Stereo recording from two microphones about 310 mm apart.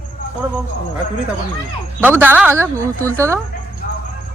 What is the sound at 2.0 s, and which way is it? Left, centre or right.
A man's voice, centre.